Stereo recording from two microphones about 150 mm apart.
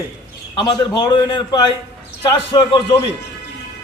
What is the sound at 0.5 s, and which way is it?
A man's voice, 30° left (ahead or behind).